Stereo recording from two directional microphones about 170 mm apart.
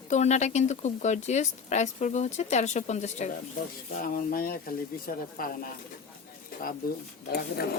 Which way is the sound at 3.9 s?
55° left (ahead or behind).